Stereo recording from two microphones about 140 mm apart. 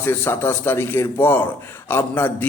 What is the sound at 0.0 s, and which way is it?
A man's voice, 15° left (ahead or behind).